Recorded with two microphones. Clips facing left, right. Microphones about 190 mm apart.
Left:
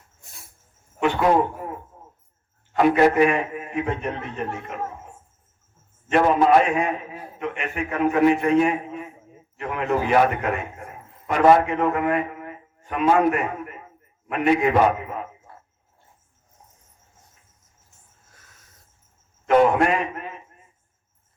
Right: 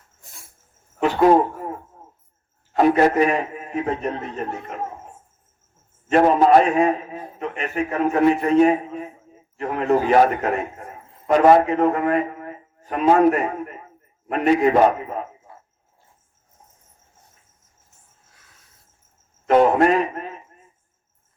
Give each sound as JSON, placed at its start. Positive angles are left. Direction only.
{"t": 2.7, "sound": "a man's voice", "side_deg": -40}
{"t": 6.1, "sound": "a man's voice", "side_deg": -40}
{"t": 19.5, "sound": "a man's voice", "side_deg": -35}